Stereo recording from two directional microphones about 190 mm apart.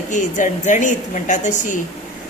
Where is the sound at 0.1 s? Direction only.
40° left (ahead or behind).